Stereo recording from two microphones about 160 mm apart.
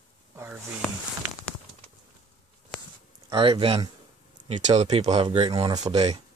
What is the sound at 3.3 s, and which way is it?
Speech, 30° right (ahead or behind).